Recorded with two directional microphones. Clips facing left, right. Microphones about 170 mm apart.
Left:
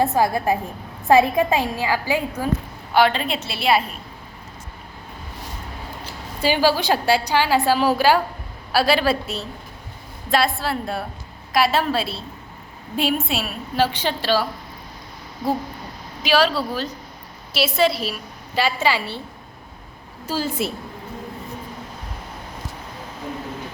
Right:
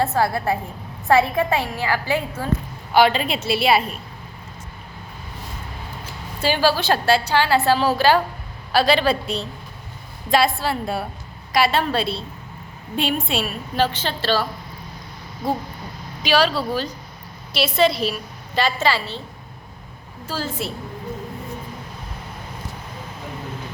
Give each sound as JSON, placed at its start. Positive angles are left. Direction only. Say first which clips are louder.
{"t": 0.0, "sound": "a woman's voice", "louder": "left 1 dB", "side_deg": 15}
{"t": 2.9, "sound": "a woman's voice", "louder": "right 1 dB", "side_deg": -5}
{"t": 6.4, "sound": "a woman's voice", "louder": "left 1 dB", "side_deg": 15}
{"t": 16.2, "sound": "a woman's voice", "louder": "even", "side_deg": 0}
{"t": 20.2, "sound": "a woman's voice", "louder": "left 3 dB", "side_deg": 15}